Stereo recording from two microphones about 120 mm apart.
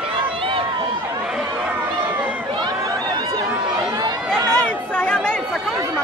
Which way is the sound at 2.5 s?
35° right (ahead or behind).